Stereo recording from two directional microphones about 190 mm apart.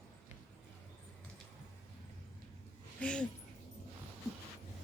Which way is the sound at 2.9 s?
5° left (ahead or behind).